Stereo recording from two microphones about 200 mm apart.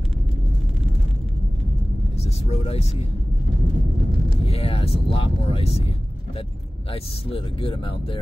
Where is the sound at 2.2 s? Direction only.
30° left (ahead or behind).